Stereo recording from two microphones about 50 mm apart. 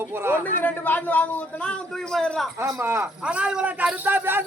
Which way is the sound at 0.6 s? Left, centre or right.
Left.